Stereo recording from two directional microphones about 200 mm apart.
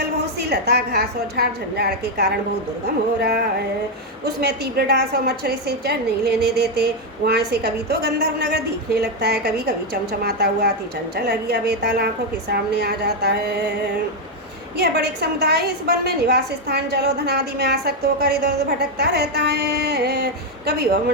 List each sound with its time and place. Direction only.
0.0 s a woman's voice: 55° right (ahead or behind)
14.8 s a woman's voice: 55° right (ahead or behind)